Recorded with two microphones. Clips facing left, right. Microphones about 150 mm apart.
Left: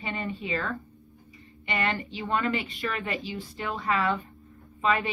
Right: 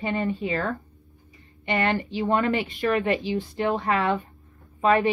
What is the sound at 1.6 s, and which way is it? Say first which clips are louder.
Speech: right 5 dB; 50° right (ahead or behind).